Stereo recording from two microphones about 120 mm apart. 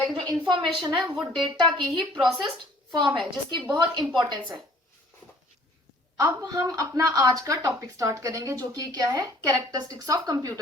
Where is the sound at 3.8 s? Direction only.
40° right (ahead or behind).